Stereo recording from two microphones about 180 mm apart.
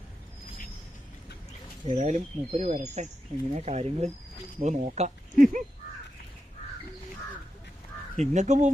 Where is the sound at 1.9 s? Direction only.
45° right (ahead or behind).